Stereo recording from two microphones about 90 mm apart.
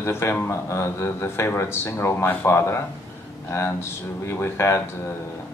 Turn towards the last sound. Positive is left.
turn(degrees=30)  # may be behind; listen again after turning